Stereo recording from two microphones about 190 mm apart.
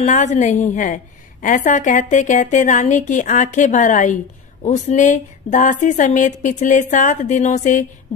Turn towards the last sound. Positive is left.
turn(degrees=40)  # may be behind; listen again after turning